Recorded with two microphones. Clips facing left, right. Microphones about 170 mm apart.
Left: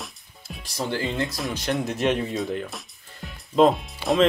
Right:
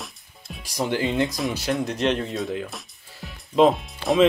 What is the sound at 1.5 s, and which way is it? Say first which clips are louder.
Speech: right 1 dB; centre (ahead or behind).